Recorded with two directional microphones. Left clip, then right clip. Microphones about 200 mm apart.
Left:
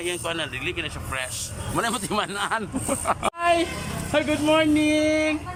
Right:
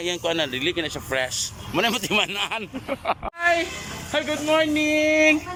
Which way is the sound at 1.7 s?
10° right (ahead or behind).